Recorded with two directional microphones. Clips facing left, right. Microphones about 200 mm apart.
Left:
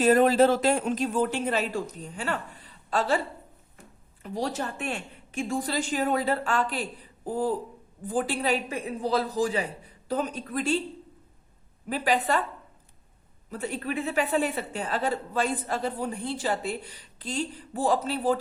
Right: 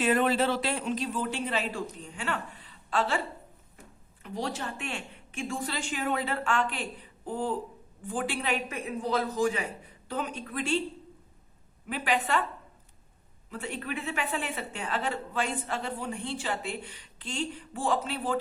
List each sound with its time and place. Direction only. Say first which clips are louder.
0.0 s a woman's voice: left 6 dB; 40° left (ahead or behind)
4.2 s a woman's voice: left 4 dB; 40° left (ahead or behind)
11.9 s a woman's voice: left 3 dB; 35° left (ahead or behind)
13.5 s a woman's voice: left 4 dB; 40° left (ahead or behind)